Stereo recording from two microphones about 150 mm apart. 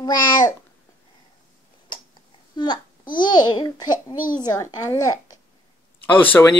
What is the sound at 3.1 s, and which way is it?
A child's voice, 30° left (ahead or behind).